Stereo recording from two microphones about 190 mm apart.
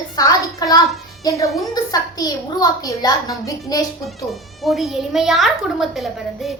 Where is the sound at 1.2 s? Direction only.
15° left (ahead or behind).